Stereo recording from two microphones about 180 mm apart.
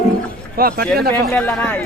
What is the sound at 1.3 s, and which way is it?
Speech, 10° left (ahead or behind).